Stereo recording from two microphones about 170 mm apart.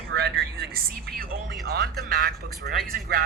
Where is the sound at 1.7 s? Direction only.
70° right (ahead or behind).